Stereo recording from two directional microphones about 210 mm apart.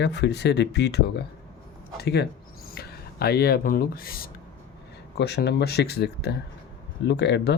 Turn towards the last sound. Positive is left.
turn(degrees=55)  # may be behind; listen again after turning